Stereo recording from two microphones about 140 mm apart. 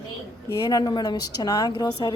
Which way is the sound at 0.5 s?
25° left (ahead or behind).